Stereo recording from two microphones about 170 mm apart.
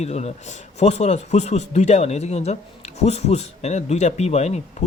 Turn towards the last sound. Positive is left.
turn(degrees=40)  # may be behind; listen again after turning